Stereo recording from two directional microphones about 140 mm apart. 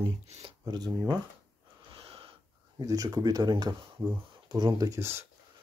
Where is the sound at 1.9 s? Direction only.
40° right (ahead or behind).